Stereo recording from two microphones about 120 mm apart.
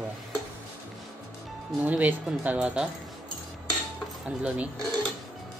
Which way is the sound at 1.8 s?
15° right (ahead or behind).